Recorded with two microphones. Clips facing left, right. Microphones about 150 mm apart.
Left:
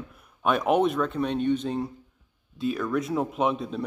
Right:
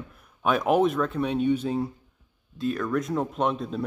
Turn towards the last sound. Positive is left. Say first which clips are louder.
# even
turn(degrees=0)  # may be behind; listen again after turning